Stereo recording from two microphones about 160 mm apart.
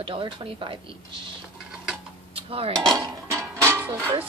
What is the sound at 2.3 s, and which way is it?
Dishes, 35° right (ahead or behind).